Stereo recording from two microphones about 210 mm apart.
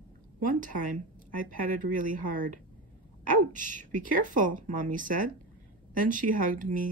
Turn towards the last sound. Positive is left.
turn(degrees=-40)  # may be behind; listen again after turning